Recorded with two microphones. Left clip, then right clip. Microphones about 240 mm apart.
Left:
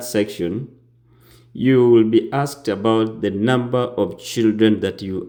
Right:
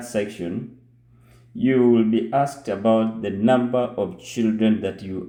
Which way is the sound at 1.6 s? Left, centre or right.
Left.